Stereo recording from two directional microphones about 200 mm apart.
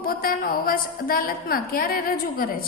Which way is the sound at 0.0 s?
45° left (ahead or behind).